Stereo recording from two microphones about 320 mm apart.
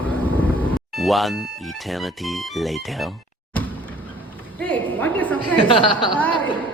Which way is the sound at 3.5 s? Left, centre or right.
Centre.